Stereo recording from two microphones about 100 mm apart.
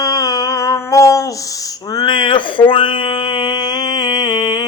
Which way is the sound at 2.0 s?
55° left (ahead or behind).